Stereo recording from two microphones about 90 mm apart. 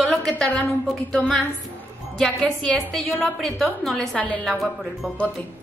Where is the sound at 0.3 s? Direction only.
15° left (ahead or behind).